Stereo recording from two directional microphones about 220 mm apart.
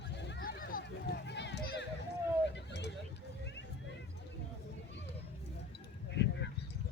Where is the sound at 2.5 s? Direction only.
50° left (ahead or behind).